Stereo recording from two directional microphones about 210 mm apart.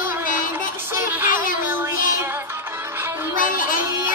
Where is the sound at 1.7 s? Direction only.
10° right (ahead or behind).